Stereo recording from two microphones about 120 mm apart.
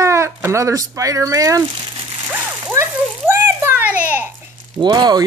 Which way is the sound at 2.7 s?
20° right (ahead or behind).